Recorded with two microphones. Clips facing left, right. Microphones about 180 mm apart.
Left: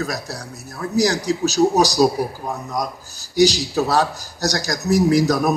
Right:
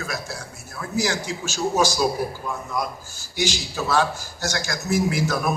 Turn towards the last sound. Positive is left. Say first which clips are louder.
# left 7 dB
turn(degrees=40)  # may be behind; listen again after turning